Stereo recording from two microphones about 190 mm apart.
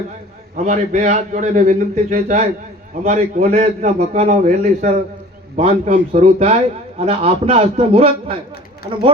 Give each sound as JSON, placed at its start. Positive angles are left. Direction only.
{"t": 0.5, "sound": "a man's voice", "side_deg": -40}